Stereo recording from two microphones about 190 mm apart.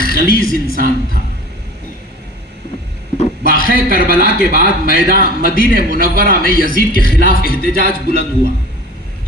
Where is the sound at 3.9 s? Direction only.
50° left (ahead or behind).